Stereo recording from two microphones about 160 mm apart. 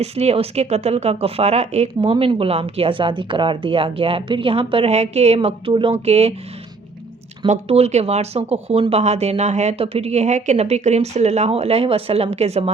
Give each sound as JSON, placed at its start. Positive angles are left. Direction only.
{"t": 0.0, "sound": "speech", "side_deg": -40}
{"t": 7.4, "sound": "speech", "side_deg": -40}